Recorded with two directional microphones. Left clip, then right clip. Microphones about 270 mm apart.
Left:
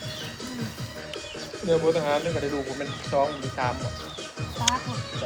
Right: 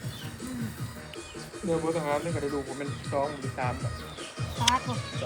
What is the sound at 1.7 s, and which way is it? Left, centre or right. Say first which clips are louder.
Speech: left 6 dB; left.